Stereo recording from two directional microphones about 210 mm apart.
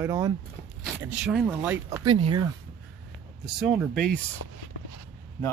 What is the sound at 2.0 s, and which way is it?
Speech, 25° right (ahead or behind).